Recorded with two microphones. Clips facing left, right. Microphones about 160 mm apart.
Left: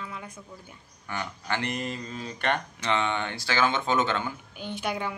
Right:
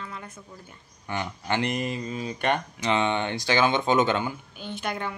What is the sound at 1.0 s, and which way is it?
Speech, 20° right (ahead or behind).